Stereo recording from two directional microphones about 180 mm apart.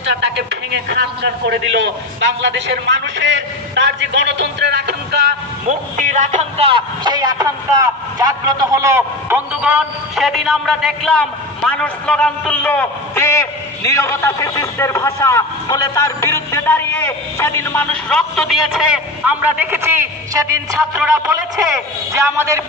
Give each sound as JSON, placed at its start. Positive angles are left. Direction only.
{"t": 0.1, "sound": "a man's voice", "side_deg": -75}
{"t": 5.7, "sound": "a man's voice", "side_deg": -40}
{"t": 22.1, "sound": "a man's voice", "side_deg": -15}